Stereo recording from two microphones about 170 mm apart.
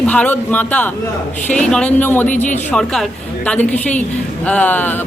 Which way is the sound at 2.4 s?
45° left (ahead or behind).